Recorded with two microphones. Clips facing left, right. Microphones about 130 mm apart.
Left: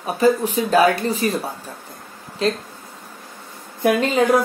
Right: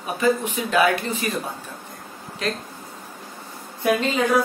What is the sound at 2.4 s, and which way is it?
Speech, 30° left (ahead or behind).